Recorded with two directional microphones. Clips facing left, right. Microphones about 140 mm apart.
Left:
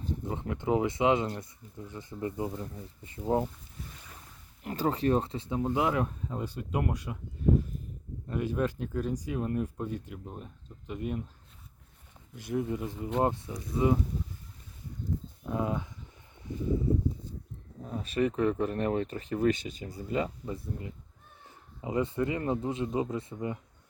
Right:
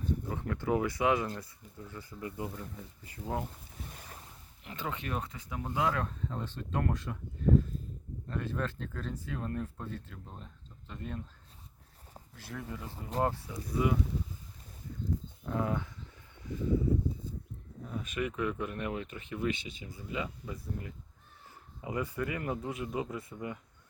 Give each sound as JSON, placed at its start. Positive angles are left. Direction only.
{"t": 0.3, "sound": "speech", "side_deg": 20}
{"t": 4.6, "sound": "speech", "side_deg": 40}
{"t": 8.3, "sound": "speech", "side_deg": 15}
{"t": 12.3, "sound": "speech", "side_deg": 20}
{"t": 15.4, "sound": "speech", "side_deg": 20}
{"t": 17.8, "sound": "speech", "side_deg": 35}